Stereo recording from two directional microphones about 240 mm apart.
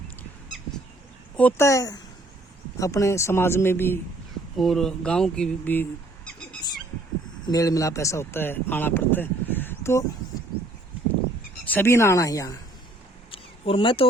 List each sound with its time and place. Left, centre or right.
1.4 s a man's voice: centre
11.6 s a man's voice: centre
13.3 s a sound: left